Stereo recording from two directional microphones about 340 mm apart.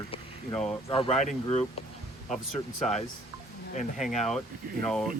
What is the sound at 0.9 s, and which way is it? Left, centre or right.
Speech, centre.